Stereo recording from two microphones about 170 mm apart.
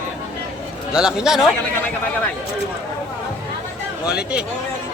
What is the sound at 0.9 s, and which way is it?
Speech, 5° right (ahead or behind).